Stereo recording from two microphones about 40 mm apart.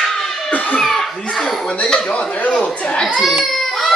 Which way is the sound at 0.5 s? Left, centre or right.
Left.